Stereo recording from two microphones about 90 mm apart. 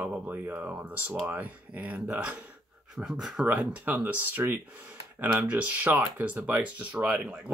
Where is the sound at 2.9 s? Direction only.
5° right (ahead or behind).